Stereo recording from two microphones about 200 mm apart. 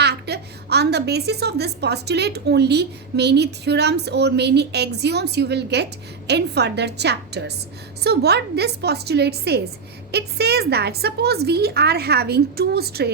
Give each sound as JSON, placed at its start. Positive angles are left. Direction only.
{"t": 0.0, "sound": "a woman's voice", "side_deg": -55}